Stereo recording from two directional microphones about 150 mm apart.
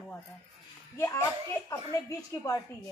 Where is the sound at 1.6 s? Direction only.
20° left (ahead or behind).